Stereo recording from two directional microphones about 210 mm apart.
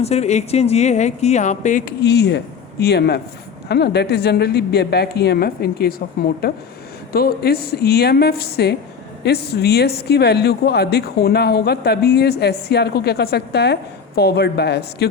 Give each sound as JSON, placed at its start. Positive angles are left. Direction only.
{"t": 0.0, "sound": "speech", "side_deg": 30}
{"t": 2.0, "sound": "speech", "side_deg": 50}